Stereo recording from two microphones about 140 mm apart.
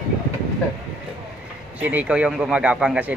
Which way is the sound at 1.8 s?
10° right (ahead or behind).